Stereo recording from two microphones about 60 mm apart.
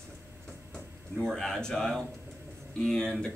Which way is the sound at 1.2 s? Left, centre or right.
Centre.